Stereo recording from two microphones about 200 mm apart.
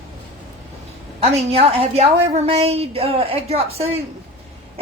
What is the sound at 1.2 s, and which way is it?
A woman's voice, 30° right (ahead or behind).